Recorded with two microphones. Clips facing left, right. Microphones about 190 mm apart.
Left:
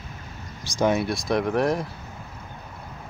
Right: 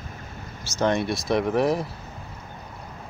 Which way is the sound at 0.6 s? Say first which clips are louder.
Left 1 dB; 10° left (ahead or behind).